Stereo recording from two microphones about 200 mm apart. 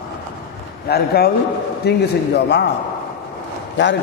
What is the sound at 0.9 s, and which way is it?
A man's voice, 55° left (ahead or behind).